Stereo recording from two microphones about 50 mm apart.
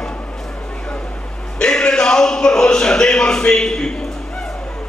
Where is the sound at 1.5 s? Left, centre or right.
Centre.